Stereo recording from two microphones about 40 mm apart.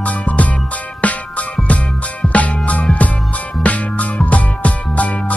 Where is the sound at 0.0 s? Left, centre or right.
Left.